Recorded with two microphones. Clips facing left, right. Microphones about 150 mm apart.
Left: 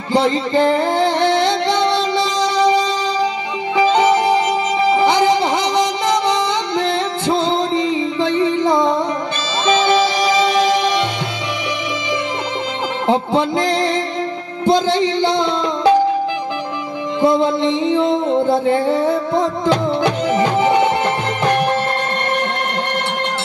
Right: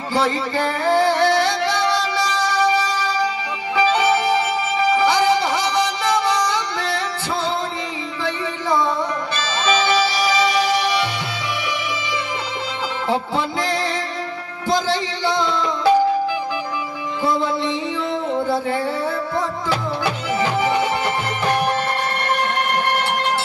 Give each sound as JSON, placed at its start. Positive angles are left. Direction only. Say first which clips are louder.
{"t": 0.1, "sound": "music", "louder": "left 5 dB", "side_deg": 20}
{"t": 4.8, "sound": "music", "louder": "left 2 dB", "side_deg": 20}
{"t": 13.0, "sound": "music", "louder": "left 6 dB", "side_deg": 20}
{"t": 17.2, "sound": "a sound", "louder": "left 6 dB", "side_deg": 20}
{"t": 20.5, "sound": "music", "louder": "left 5 dB", "side_deg": 20}